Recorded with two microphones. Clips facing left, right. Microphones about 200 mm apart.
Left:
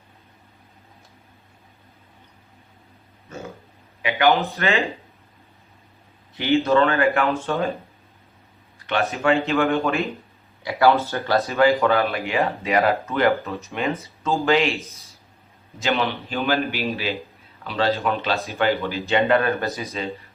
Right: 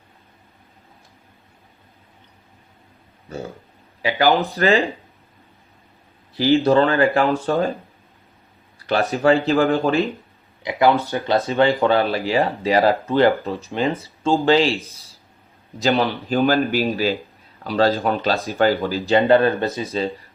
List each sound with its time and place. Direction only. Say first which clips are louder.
3.3 s speech: right 4 dB; 35° right (ahead or behind)
6.3 s speech: right 3 dB; 35° right (ahead or behind)
8.9 s speech: right 4 dB; 35° right (ahead or behind)
10.6 s speech: right 1 dB; 20° right (ahead or behind)
11.8 s a man's voice: right 2 dB; 30° right (ahead or behind)